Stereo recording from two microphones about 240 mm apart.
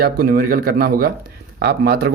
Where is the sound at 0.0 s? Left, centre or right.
Right.